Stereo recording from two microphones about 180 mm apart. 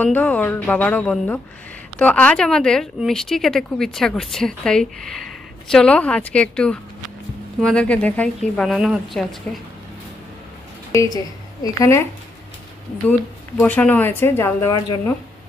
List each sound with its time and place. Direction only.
0.0 s a woman's voice: 10° left (ahead or behind)
9.5 s a woman's voice: 5° left (ahead or behind)
11.6 s a woman's voice: 20° left (ahead or behind)
13.6 s a woman's voice: 10° left (ahead or behind)